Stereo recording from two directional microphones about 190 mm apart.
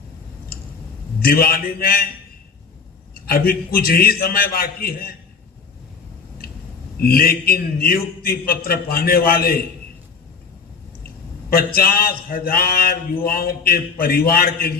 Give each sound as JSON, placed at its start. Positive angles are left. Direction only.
{"t": 1.2, "sound": "a man's voice", "side_deg": 50}
{"t": 3.2, "sound": "a man's voice", "side_deg": 50}
{"t": 7.0, "sound": "a man's voice", "side_deg": 50}
{"t": 11.0, "sound": "a man's voice", "side_deg": 50}